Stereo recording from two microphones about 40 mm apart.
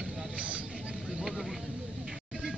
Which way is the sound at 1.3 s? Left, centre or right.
Centre.